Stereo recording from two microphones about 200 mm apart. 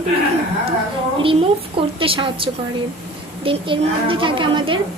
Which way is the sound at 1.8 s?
25° right (ahead or behind).